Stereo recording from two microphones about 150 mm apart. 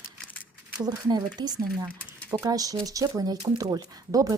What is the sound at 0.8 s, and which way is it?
A woman's voice, 25° right (ahead or behind).